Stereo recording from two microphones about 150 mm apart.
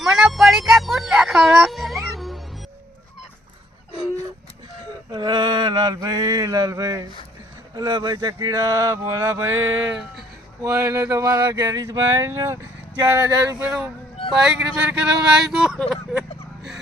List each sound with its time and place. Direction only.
0.0 s a sound: centre (ahead or behind)
5.1 s mantra: 30° right (ahead or behind)
13.1 s male singing: 15° right (ahead or behind)
14.3 s speech: 5° right (ahead or behind)